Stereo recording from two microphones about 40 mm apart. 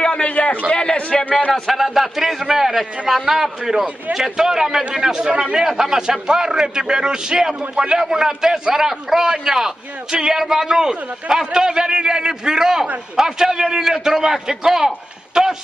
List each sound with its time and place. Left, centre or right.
0.0 s a sound: left
0.7 s a man's voice: left
1.5 s a man's voice: centre